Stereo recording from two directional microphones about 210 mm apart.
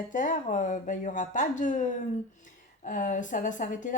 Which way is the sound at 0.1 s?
40° left (ahead or behind).